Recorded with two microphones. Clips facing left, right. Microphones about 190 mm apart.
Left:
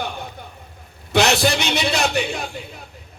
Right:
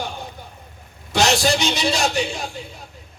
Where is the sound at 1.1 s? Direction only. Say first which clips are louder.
Left 1 dB; 60° left (ahead or behind).